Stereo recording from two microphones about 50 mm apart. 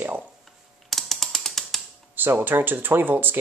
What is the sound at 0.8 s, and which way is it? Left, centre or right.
Mechanisms, centre.